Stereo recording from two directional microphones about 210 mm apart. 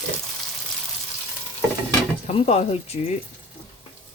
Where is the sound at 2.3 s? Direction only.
30° left (ahead or behind).